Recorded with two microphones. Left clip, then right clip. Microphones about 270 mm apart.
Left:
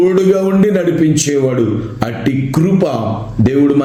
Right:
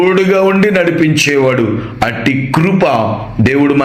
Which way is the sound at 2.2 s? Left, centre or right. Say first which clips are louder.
Right 3 dB; centre.